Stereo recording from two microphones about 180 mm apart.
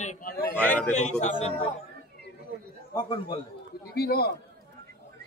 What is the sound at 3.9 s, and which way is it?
Speech, 60° left (ahead or behind).